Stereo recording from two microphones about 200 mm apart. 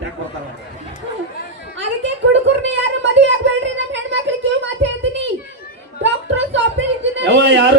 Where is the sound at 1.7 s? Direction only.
65° right (ahead or behind).